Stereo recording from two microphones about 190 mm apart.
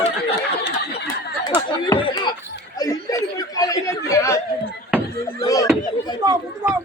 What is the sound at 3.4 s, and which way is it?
Chatter, 20° left (ahead or behind).